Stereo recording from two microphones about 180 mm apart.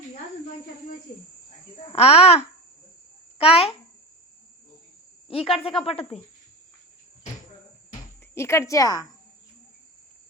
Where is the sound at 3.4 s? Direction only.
30° left (ahead or behind).